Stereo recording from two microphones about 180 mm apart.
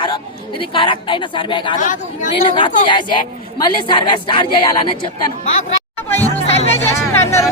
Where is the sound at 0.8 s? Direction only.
30° left (ahead or behind).